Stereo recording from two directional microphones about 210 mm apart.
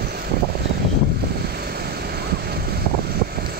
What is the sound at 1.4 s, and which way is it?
Vehicle, 50° right (ahead or behind).